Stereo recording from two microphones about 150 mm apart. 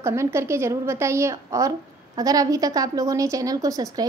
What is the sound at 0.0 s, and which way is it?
A woman's voice, 20° right (ahead or behind).